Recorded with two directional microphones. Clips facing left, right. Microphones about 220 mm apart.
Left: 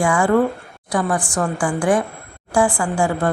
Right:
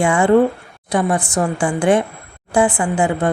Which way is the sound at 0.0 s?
25° right (ahead or behind).